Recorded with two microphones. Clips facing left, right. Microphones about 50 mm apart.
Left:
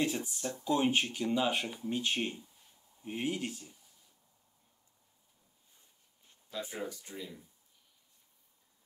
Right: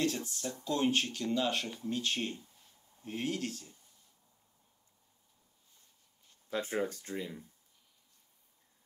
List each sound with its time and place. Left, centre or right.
0.0 s speech: centre
6.5 s speech: right